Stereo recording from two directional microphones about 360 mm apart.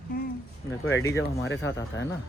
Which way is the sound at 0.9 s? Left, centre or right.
Centre.